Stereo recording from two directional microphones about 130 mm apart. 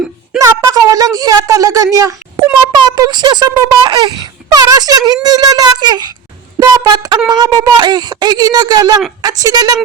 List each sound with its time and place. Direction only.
0.3 s a child's voice: 25° right (ahead or behind)